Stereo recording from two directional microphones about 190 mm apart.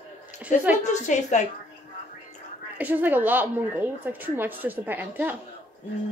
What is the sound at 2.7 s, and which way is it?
A woman's voice, 10° right (ahead or behind).